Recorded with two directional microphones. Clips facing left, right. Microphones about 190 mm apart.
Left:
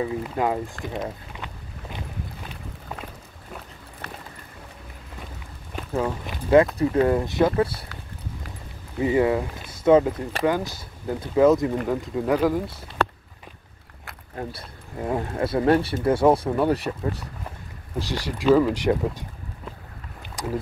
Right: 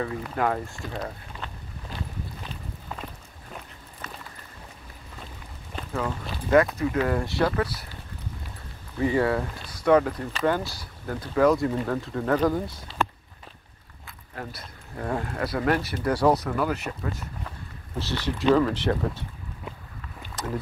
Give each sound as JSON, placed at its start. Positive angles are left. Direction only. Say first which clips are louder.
{"t": 0.0, "sound": "speech", "louder": "left 2 dB", "side_deg": 15}
{"t": 4.0, "sound": "vehicle", "louder": "left 2 dB", "side_deg": 65}
{"t": 5.8, "sound": "speech", "louder": "left 4 dB", "side_deg": 15}
{"t": 8.9, "sound": "speech", "louder": "left 3 dB", "side_deg": 20}
{"t": 14.3, "sound": "speech", "louder": "left 4 dB", "side_deg": 25}
{"t": 17.9, "sound": "speech", "louder": "left 1 dB", "side_deg": 10}
{"t": 20.2, "sound": "rowboat", "louder": "left 2 dB", "side_deg": 15}